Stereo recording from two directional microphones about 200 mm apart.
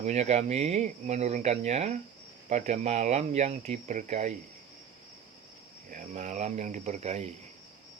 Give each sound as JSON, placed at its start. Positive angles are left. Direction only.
{"t": 0.0, "sound": "speech", "side_deg": -35}
{"t": 5.9, "sound": "speech", "side_deg": -40}